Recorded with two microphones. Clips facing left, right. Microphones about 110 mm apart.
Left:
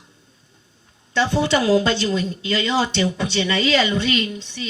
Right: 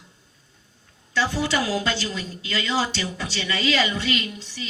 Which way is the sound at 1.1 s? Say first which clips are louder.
Left 5 dB; 25° left (ahead or behind).